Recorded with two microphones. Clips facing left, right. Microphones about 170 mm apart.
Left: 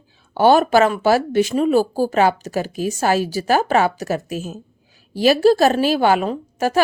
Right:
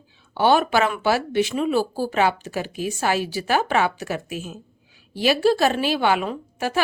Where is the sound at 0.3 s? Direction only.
40° left (ahead or behind).